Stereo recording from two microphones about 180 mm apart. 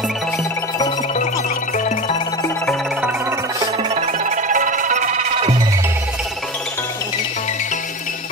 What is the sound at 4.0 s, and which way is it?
Music, 40° right (ahead or behind).